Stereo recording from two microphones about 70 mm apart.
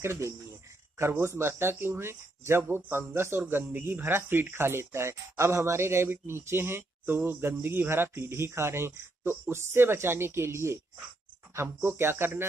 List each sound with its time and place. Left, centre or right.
0.0 s speech: right